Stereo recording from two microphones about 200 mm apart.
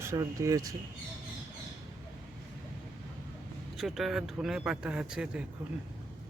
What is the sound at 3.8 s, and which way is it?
A man's voice, centre (ahead or behind).